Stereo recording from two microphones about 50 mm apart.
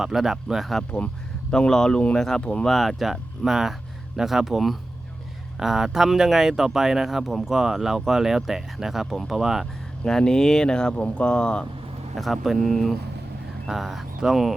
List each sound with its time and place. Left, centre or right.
0.0 s speech: centre
0.9 s speech: left
2.4 s speech: left
2.6 s speech: centre
10.1 s speech: centre
12.1 s speech: centre